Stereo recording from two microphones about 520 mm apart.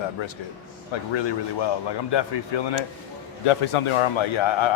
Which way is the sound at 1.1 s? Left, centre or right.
Left.